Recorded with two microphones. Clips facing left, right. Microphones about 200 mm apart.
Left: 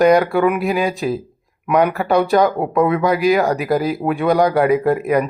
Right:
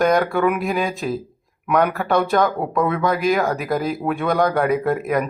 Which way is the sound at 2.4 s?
15° left (ahead or behind).